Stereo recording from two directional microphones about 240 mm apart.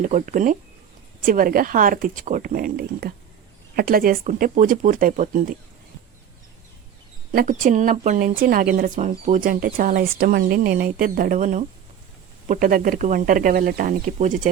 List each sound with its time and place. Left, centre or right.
0.0 s speech: right
7.3 s speech: right